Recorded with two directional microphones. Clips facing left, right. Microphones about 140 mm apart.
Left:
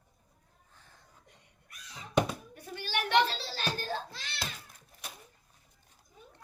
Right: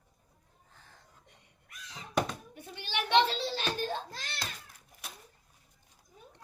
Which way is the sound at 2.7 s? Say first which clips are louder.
Right 1 dB; 20° right (ahead or behind).